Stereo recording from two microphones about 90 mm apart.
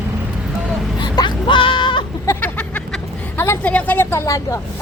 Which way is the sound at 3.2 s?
25° left (ahead or behind).